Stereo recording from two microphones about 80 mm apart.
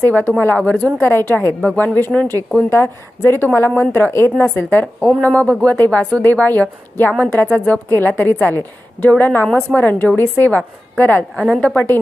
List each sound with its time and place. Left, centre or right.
0.0 s a woman's voice: left
1.0 s a woman's voice: left
6.2 s a woman's voice: left
11.3 s a woman's voice: centre
11.6 s a woman's voice: centre